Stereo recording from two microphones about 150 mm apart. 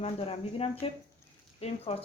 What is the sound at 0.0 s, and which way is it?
Speech, 40° left (ahead or behind).